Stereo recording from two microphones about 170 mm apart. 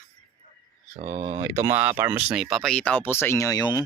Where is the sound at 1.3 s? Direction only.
20° right (ahead or behind); by 3.8 s 20° left (ahead or behind).